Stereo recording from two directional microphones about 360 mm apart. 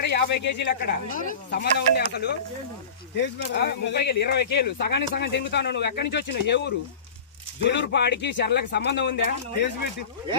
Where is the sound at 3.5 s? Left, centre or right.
Left.